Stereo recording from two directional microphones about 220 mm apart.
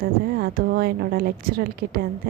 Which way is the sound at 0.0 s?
40° right (ahead or behind).